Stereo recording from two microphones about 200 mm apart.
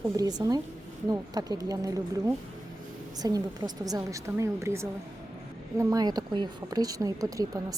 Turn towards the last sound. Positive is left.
turn(degrees=-15)  # may be behind; listen again after turning